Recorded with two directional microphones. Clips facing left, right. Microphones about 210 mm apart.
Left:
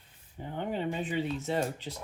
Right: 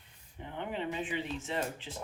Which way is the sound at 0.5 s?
40° left (ahead or behind).